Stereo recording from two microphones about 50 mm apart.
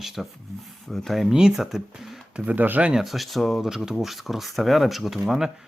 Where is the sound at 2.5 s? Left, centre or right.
Right.